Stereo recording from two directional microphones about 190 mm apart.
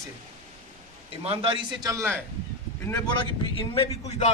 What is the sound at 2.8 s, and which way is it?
Speech, 15° left (ahead or behind).